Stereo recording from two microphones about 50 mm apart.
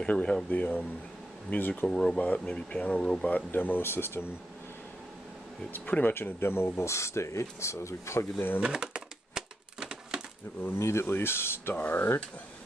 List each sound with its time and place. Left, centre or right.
0.0 s speech: left
0.5 s speech: left
1.9 s speech: centre
3.5 s speech: left
5.7 s speech: left
6.1 s speech: left
8.5 s a sound: centre
10.7 s speech: left